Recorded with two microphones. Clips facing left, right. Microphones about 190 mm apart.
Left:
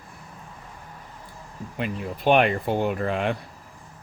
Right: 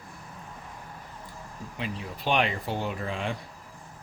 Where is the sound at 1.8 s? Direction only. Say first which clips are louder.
Left 7 dB; 55° left (ahead or behind).